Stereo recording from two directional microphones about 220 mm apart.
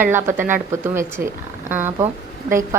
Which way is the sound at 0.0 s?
10° right (ahead or behind).